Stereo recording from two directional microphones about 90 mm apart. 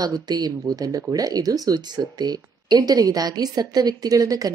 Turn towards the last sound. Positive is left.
turn(degrees=-40)  # may be behind; listen again after turning